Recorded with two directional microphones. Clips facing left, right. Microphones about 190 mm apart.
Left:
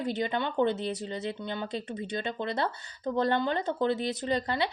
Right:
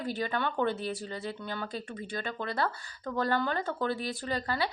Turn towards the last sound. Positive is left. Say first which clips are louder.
# left 3 dB
turn(degrees=25)  # may be behind; listen again after turning